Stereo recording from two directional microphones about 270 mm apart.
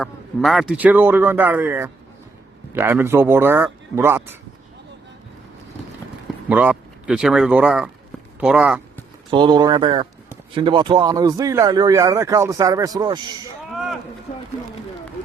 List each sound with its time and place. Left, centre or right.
0.0 s speech: centre
6.5 s speech: centre
9.3 s speech: centre
13.7 s a sound: centre